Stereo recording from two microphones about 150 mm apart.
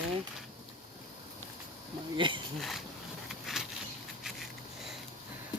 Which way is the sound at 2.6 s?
Centre (ahead or behind).